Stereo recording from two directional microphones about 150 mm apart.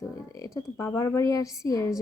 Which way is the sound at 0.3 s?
20° left (ahead or behind).